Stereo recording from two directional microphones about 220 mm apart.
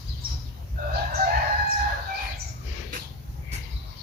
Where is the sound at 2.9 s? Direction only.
40° right (ahead or behind).